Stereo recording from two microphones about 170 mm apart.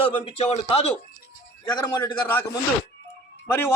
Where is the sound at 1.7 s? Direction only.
25° left (ahead or behind).